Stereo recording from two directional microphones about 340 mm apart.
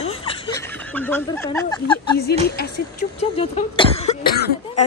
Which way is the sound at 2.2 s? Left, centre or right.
Left.